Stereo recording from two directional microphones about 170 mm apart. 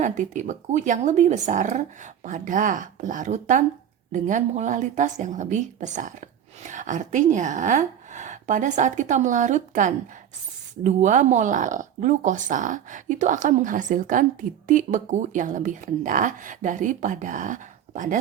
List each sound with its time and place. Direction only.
0.0 s a woman's voice: 45° right (ahead or behind)